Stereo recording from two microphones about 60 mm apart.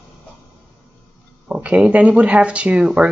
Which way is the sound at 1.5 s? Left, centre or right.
Right.